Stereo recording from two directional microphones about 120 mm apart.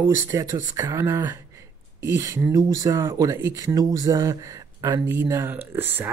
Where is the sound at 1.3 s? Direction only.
25° right (ahead or behind).